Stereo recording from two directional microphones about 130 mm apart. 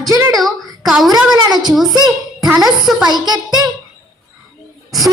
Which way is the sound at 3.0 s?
30° right (ahead or behind).